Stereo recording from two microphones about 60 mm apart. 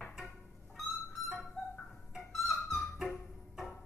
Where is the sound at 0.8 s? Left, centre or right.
Left.